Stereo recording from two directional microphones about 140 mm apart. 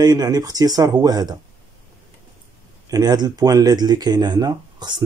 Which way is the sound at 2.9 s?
30° right (ahead or behind).